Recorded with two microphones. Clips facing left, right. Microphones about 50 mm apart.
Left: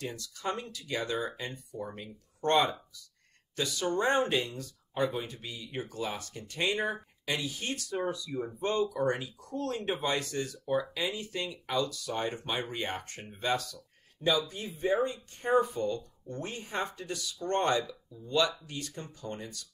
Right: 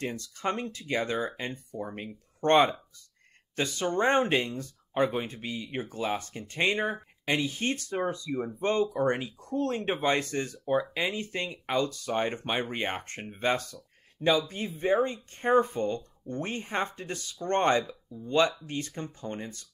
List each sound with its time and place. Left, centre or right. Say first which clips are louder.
0.0 s speech: right 4 dB; right